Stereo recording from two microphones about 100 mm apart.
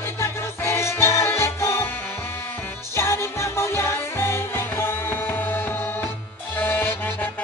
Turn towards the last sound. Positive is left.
turn(degrees=20)  # may be behind; listen again after turning